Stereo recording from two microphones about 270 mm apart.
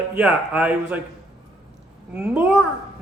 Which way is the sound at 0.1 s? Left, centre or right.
Centre.